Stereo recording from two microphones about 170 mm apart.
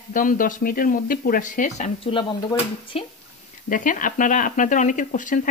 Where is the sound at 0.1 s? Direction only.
55° left (ahead or behind).